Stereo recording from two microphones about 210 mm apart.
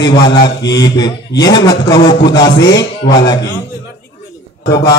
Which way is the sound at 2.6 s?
55° left (ahead or behind).